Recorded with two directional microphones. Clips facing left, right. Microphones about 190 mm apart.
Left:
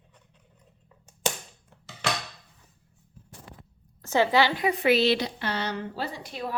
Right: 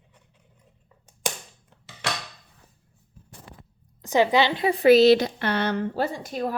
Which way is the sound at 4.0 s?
15° right (ahead or behind).